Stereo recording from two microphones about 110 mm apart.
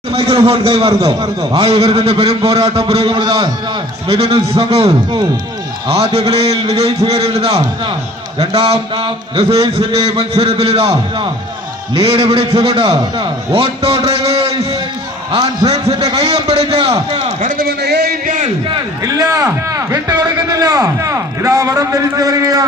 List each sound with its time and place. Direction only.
0.1 s a man's voice: 60° right (ahead or behind)
3.2 s a man's voice: 40° right (ahead or behind)
4.1 s a man's voice: 65° right (ahead or behind)
5.9 s a man's voice: 65° right (ahead or behind)
11.9 s a man's voice: 65° right (ahead or behind)
13.0 s a man's voice: 40° right (ahead or behind)
13.5 s a man's voice: 65° right (ahead or behind)
19.0 s a man's voice: 30° right (ahead or behind)